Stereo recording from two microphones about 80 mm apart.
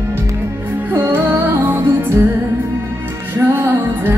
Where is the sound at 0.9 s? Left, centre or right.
Right.